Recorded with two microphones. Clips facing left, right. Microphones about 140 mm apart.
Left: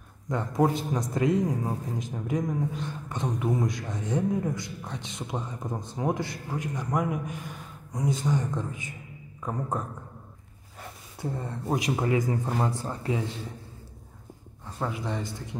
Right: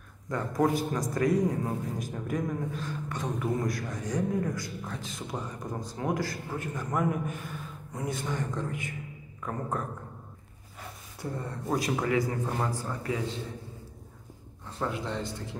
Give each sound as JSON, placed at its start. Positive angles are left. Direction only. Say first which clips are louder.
{"t": 0.3, "sound": "a man's voice", "louder": "left 2 dB", "side_deg": 20}
{"t": 11.1, "sound": "a man's voice", "louder": "left 2 dB", "side_deg": 25}
{"t": 12.4, "sound": "speech", "louder": "left 3 dB", "side_deg": 15}
{"t": 12.8, "sound": "a man's voice", "louder": "left 2 dB", "side_deg": 25}
{"t": 14.8, "sound": "speech", "louder": "left 1 dB", "side_deg": 10}